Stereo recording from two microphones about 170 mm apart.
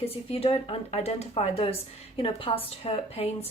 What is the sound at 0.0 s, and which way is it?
A woman's voice, 35° left (ahead or behind).